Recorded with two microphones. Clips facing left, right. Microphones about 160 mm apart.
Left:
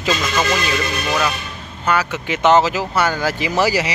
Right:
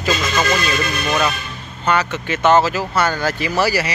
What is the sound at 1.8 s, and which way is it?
A man's voice, 5° left (ahead or behind).